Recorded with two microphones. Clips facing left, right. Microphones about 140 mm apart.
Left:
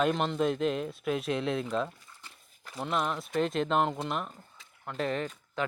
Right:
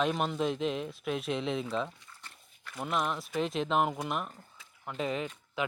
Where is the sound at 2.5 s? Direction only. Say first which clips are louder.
Left 2 dB; 35° left (ahead or behind).